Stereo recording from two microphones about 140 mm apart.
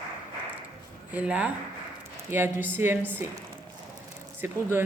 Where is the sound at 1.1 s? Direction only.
10° right (ahead or behind).